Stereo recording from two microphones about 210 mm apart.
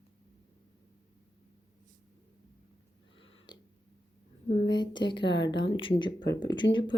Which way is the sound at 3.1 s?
65° left (ahead or behind).